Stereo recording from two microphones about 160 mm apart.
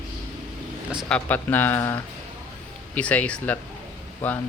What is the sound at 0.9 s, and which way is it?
Speech, centre (ahead or behind).